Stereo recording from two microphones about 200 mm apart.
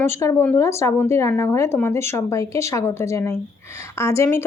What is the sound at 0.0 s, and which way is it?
Speech, 15° left (ahead or behind).